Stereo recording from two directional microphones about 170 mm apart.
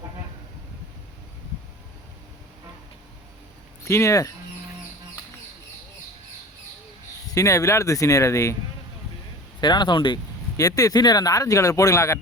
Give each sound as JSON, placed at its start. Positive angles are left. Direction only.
{"t": 3.8, "sound": "speech", "side_deg": 15}
{"t": 7.3, "sound": "speech", "side_deg": 20}
{"t": 9.6, "sound": "speech", "side_deg": 25}